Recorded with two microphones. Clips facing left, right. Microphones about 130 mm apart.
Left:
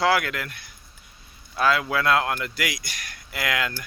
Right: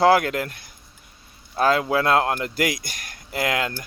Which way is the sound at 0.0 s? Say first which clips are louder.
Right 5 dB; 40° right (ahead or behind).